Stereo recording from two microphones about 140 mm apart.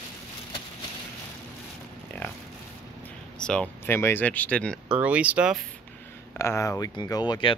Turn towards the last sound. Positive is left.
turn(degrees=30)  # may be behind; listen again after turning